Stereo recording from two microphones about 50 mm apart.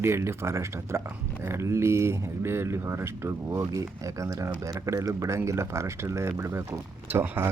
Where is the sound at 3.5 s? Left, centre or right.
Right.